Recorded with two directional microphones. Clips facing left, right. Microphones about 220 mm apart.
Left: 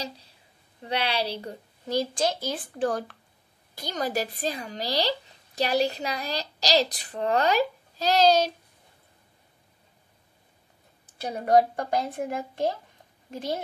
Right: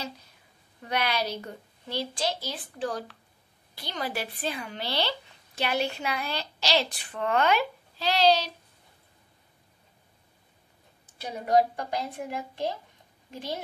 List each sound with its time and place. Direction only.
0.8 s speech: 30° left (ahead or behind)
11.1 s a woman's voice: 50° left (ahead or behind)